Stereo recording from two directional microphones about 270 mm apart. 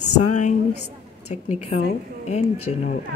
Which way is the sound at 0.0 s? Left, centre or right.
Left.